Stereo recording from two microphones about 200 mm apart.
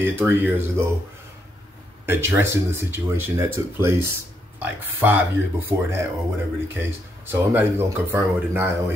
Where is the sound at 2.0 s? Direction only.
10° right (ahead or behind).